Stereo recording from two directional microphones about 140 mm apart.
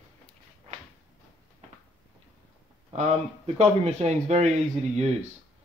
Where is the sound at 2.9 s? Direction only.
50° right (ahead or behind).